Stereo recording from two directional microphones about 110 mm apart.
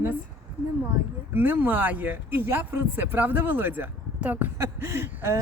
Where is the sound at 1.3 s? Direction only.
20° right (ahead or behind).